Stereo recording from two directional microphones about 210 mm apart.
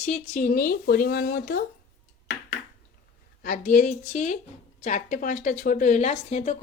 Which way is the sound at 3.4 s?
40° left (ahead or behind).